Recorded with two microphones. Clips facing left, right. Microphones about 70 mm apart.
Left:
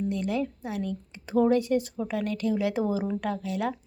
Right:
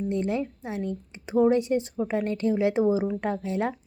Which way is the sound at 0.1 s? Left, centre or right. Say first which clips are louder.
Right 2 dB; right.